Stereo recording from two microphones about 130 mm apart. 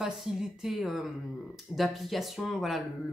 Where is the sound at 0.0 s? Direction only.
5° right (ahead or behind).